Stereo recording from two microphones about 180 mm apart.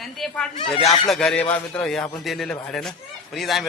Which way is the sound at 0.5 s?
40° left (ahead or behind).